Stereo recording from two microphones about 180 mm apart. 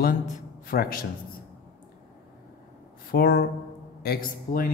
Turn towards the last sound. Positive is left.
turn(degrees=55)  # may be behind; listen again after turning